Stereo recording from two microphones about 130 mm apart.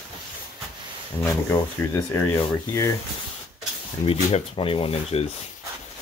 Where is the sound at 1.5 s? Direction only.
20° left (ahead or behind).